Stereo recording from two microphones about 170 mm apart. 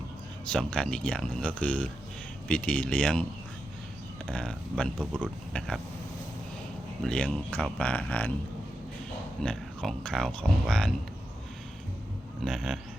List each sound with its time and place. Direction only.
0.4 s speech: 5° left (ahead or behind)
4.3 s speech: 5° left (ahead or behind)
7.0 s speech: 5° left (ahead or behind)
9.4 s speech: 5° left (ahead or behind)
12.4 s speech: centre (ahead or behind)